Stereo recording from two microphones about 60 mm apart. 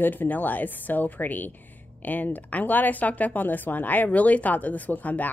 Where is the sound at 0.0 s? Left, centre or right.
Left.